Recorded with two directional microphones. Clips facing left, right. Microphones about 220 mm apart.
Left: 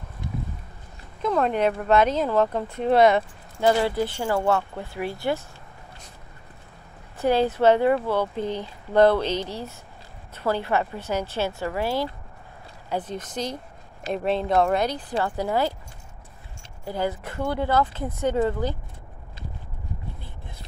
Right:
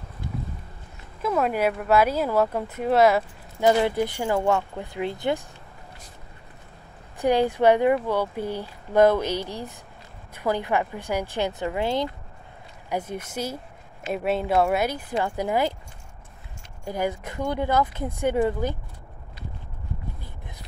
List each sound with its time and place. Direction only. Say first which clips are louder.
1.2 s speech: left 1 dB; 5° right (ahead or behind)
3.6 s speech: right 1 dB; 15° right (ahead or behind)
7.2 s speech: even; 15° right (ahead or behind)
16.8 s speech: even; 15° right (ahead or behind)